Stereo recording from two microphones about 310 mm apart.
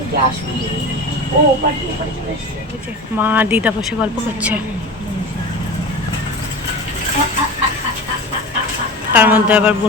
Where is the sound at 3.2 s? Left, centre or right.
Centre.